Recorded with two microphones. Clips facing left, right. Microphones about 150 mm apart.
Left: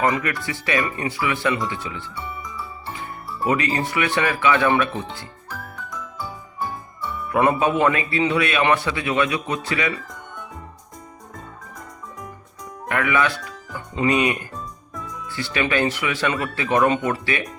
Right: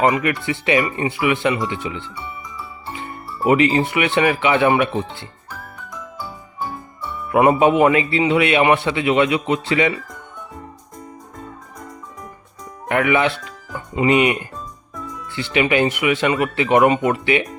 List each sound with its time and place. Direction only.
0.1 s speech: 20° right (ahead or behind)
7.3 s speech: 20° right (ahead or behind)
12.9 s speech: 25° right (ahead or behind)
14.5 s music: centre (ahead or behind)
15.3 s speech: 20° right (ahead or behind)